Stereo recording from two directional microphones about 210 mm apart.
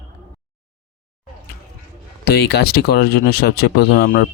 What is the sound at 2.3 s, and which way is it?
Speech, 50° left (ahead or behind).